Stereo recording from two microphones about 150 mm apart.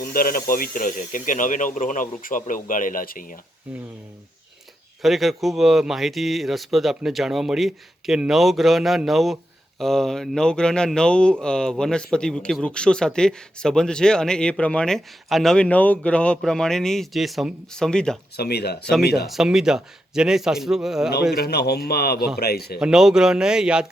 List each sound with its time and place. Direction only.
0.0 s speech: 75° left (ahead or behind)
5.0 s speech: centre (ahead or behind)
18.3 s a man's voice: 90° left
19.3 s speech: 5° right (ahead or behind)
21.3 s a man's voice: 90° left
22.8 s speech: 5° right (ahead or behind)